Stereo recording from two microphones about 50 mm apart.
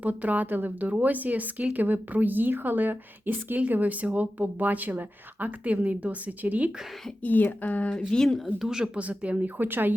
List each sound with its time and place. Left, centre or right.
0.0 s speech: right
7.2 s speech: left
7.9 s speech: centre
8.5 s speech: centre
8.8 s speech: right
9.6 s speech: right